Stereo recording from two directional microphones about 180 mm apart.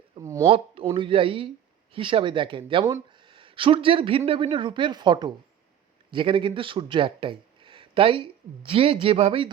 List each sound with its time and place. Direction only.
0.2 s speech: 15° right (ahead or behind)
0.4 s speech: 30° right (ahead or behind)